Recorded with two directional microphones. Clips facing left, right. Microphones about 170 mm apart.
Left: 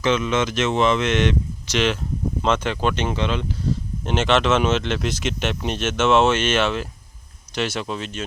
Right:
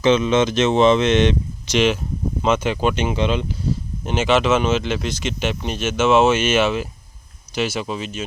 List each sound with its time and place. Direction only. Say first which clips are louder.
0.0 s speech: right 5 dB; 20° right (ahead or behind)
4.0 s speech: right 2 dB; 5° right (ahead or behind)